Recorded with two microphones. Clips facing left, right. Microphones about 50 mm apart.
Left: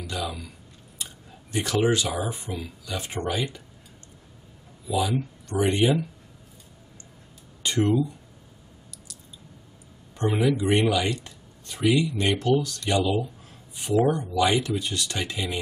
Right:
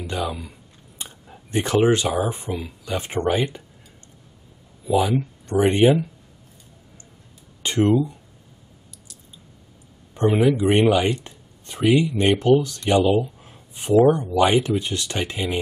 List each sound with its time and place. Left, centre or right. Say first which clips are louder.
0.0 s speech: right 5 dB; right
4.8 s speech: right 6 dB; right
7.6 s speech: right 4 dB; right
10.1 s speech: right 5 dB; right